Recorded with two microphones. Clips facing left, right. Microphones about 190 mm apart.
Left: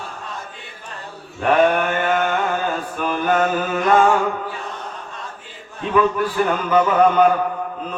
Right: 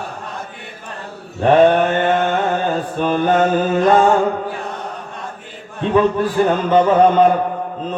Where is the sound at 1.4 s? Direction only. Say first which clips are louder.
Right 5 dB; 30° right (ahead or behind).